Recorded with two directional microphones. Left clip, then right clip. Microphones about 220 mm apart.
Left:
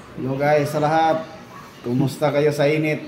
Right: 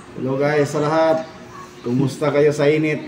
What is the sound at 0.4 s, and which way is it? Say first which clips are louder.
A woman's voice: left 1 dB; 5° left (ahead or behind).